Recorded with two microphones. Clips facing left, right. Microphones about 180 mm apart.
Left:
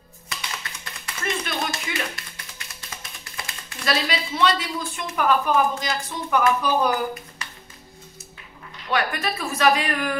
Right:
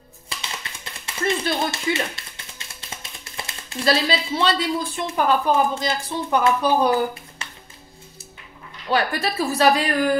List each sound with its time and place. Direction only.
1.0 s a sound: 30° right (ahead or behind)
2.9 s speech: 25° right (ahead or behind)
8.9 s a woman's voice: 35° right (ahead or behind)